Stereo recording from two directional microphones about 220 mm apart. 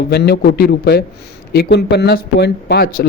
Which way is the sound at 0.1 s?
45° left (ahead or behind).